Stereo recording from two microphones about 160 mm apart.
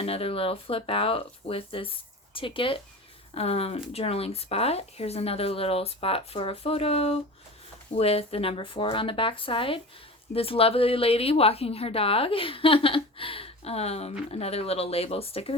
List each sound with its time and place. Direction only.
0.0 s a woman's voice: 35° left (ahead or behind)